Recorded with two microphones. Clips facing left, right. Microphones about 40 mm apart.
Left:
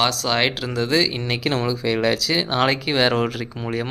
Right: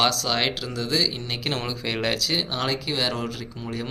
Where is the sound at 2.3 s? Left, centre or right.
Left.